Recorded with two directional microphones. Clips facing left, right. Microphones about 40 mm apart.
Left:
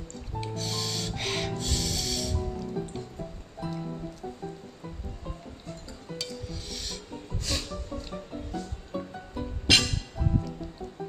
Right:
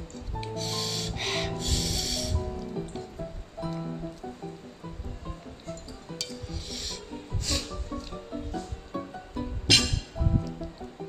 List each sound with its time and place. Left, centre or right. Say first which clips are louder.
0.4 s snort: right 1 dB; centre
6.7 s music: right 1 dB; centre
9.7 s music: left 1 dB; centre